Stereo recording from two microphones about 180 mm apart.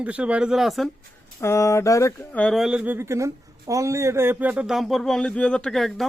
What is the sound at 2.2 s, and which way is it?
Speech, 5° left (ahead or behind).